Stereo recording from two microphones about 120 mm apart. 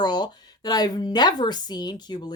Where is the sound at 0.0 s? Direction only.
35° left (ahead or behind).